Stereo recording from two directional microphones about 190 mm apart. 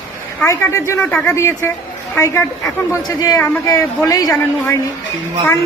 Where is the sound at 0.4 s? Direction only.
15° left (ahead or behind).